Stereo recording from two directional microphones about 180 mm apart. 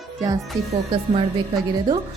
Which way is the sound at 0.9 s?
30° right (ahead or behind).